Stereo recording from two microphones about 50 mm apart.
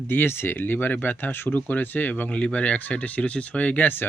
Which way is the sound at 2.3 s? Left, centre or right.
Left.